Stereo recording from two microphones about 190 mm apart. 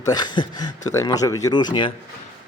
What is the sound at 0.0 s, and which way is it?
Speech, 20° left (ahead or behind).